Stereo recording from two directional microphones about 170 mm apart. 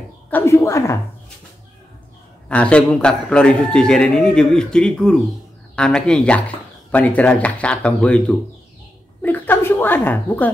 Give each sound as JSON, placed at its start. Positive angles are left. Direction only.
{"t": 0.3, "sound": "speech", "side_deg": 15}
{"t": 2.4, "sound": "a man's voice", "side_deg": 5}